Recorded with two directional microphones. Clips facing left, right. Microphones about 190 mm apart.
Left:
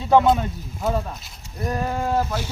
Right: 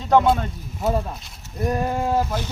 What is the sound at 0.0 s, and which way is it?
Speech, 10° left (ahead or behind).